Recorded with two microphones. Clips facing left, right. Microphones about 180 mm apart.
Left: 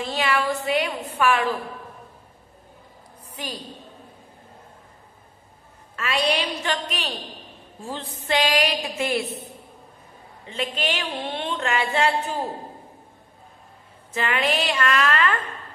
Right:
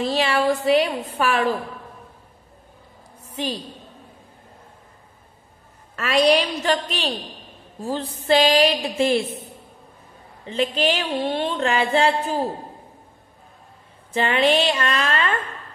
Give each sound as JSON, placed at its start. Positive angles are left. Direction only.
{"t": 0.0, "sound": "speech", "side_deg": -30}
{"t": 3.3, "sound": "a woman's voice", "side_deg": -25}
{"t": 5.9, "sound": "speech", "side_deg": -40}
{"t": 10.4, "sound": "speech", "side_deg": -35}
{"t": 14.1, "sound": "a woman's voice", "side_deg": -30}